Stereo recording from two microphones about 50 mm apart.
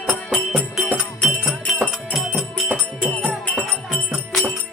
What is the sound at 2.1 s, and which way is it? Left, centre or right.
Music, centre.